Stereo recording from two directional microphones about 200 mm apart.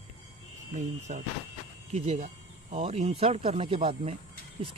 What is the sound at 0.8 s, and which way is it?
Speech, 40° right (ahead or behind).